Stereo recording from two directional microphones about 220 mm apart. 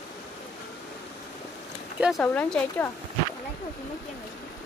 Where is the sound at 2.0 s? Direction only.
5° left (ahead or behind).